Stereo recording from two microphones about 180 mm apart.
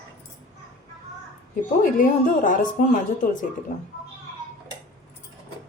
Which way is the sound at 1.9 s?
50° left (ahead or behind).